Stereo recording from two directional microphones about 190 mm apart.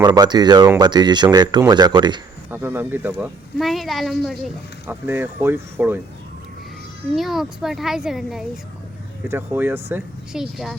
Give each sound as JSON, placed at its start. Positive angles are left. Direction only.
{"t": 0.0, "sound": "speech", "side_deg": -20}
{"t": 2.5, "sound": "speech", "side_deg": -10}
{"t": 3.6, "sound": "speech", "side_deg": 0}
{"t": 4.9, "sound": "speech", "side_deg": -10}
{"t": 7.2, "sound": "speech", "side_deg": 0}